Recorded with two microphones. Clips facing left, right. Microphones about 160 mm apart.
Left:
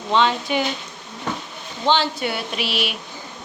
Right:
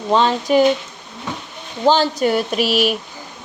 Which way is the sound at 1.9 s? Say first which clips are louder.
Right 5 dB; 40° right (ahead or behind).